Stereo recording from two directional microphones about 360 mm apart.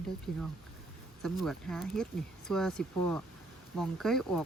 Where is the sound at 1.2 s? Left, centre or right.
Centre.